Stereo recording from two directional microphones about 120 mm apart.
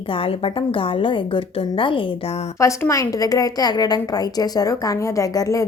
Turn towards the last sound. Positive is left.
turn(degrees=25)  # may be behind; listen again after turning